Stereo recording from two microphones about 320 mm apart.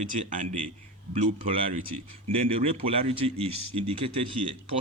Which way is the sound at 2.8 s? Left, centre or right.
Centre.